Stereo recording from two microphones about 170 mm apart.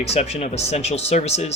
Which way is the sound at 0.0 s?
40° left (ahead or behind).